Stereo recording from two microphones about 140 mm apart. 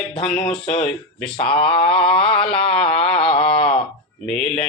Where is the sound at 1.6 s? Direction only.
40° left (ahead or behind).